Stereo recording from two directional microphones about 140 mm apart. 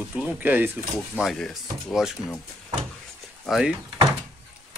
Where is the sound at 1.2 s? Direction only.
Centre (ahead or behind).